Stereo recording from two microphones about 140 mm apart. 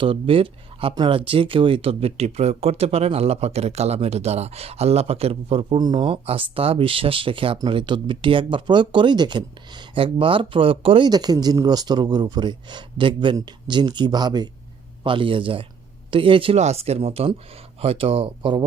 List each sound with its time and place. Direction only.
0.0 s speech: 40° right (ahead or behind)
16.6 s speech: 50° right (ahead or behind)